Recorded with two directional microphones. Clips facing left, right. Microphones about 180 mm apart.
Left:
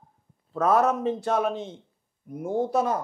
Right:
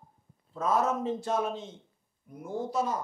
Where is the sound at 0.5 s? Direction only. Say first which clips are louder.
Left 6 dB; 65° left (ahead or behind).